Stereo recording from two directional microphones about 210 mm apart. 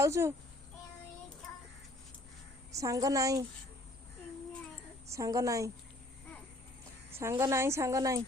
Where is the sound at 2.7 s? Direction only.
15° right (ahead or behind).